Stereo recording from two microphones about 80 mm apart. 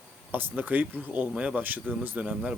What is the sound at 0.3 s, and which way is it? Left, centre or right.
Speech, right.